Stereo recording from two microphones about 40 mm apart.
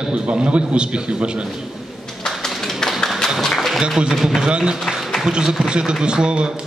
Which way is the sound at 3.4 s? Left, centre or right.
Centre.